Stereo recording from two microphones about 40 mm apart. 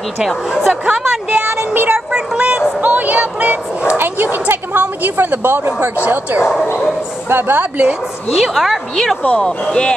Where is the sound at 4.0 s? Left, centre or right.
Right.